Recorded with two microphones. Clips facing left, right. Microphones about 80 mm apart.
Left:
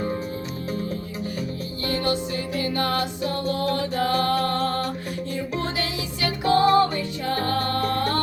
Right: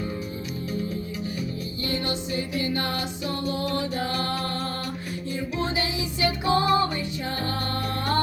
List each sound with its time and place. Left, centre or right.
2.6 s music: left
6.4 s music: left